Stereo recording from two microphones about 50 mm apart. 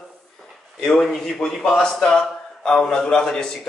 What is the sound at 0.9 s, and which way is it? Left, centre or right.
Speech, centre.